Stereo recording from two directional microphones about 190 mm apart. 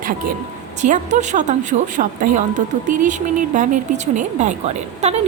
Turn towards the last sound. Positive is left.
turn(degrees=-35)  # may be behind; listen again after turning